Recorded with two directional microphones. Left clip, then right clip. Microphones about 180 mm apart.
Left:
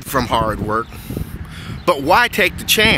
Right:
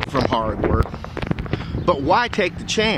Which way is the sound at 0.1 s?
15° left (ahead or behind).